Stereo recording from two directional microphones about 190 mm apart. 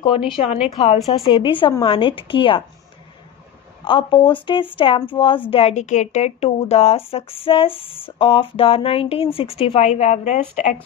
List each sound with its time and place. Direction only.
0.0 s a woman's voice: 25° left (ahead or behind)
3.8 s a woman's voice: 25° left (ahead or behind)